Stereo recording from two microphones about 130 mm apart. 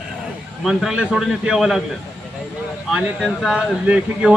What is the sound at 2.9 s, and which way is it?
A man's voice, centre (ahead or behind).